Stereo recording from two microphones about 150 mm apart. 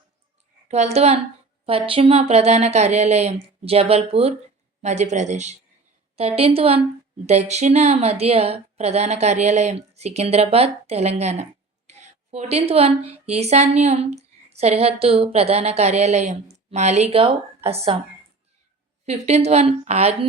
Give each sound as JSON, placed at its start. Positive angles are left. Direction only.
{"t": 0.7, "sound": "a woman's voice", "side_deg": -45}
{"t": 19.0, "sound": "speech", "side_deg": -45}